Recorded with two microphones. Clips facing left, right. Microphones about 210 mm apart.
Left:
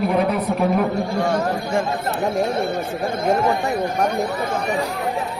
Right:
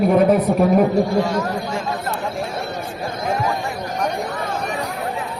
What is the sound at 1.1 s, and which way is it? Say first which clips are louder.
Speech: right 1 dB; 55° left (ahead or behind).